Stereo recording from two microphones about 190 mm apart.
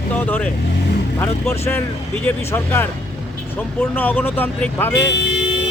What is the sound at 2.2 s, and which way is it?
Speech, 15° left (ahead or behind).